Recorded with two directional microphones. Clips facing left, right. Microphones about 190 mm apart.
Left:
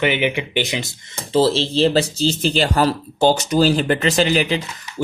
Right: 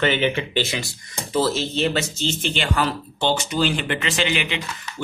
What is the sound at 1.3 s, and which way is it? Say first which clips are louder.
Speech: left 5 dB; 30° left (ahead or behind).